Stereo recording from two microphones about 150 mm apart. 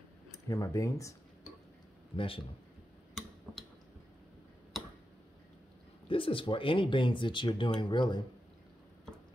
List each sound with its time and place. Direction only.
0.5 s speech: 20° left (ahead or behind)
2.1 s speech: 35° left (ahead or behind)
6.0 s speech: 35° left (ahead or behind)